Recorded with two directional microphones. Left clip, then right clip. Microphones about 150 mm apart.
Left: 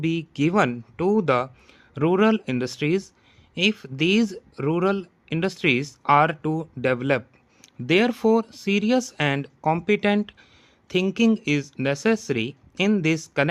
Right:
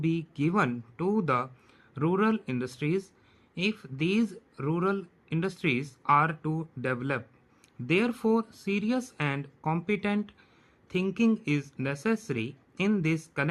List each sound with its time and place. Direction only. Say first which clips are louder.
0.0 s speech: left 6 dB; 50° left (ahead or behind)